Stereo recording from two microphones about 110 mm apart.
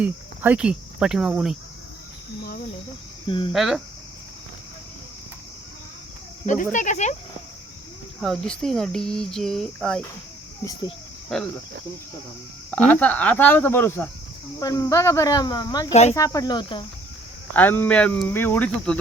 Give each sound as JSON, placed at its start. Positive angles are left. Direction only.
{"t": 0.0, "sound": "speech", "side_deg": -10}
{"t": 3.2, "sound": "speech", "side_deg": 50}
{"t": 3.5, "sound": "speech", "side_deg": 0}
{"t": 6.4, "sound": "speech", "side_deg": 90}
{"t": 8.2, "sound": "speech", "side_deg": 5}
{"t": 11.3, "sound": "speech", "side_deg": 5}
{"t": 12.7, "sound": "speech", "side_deg": 15}
{"t": 14.6, "sound": "speech", "side_deg": 30}
{"t": 15.9, "sound": "speech", "side_deg": 90}
{"t": 16.1, "sound": "speech", "side_deg": 30}
{"t": 17.5, "sound": "speech", "side_deg": 15}